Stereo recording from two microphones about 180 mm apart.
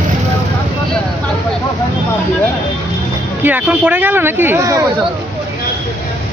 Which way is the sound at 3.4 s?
10° right (ahead or behind).